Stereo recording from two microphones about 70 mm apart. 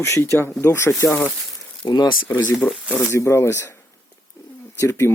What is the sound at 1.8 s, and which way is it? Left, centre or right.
Speech, left.